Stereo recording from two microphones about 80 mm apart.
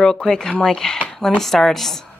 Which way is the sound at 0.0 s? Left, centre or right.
Centre.